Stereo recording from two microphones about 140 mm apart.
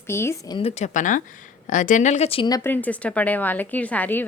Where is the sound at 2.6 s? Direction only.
10° left (ahead or behind).